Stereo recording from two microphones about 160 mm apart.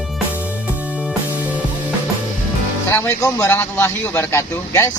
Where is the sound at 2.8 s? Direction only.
15° left (ahead or behind).